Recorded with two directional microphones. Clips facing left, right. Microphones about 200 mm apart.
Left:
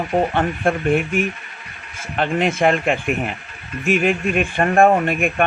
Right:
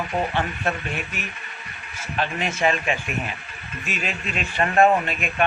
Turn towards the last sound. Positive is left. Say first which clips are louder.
# left 4 dB
turn(degrees=50)  # may be behind; listen again after turning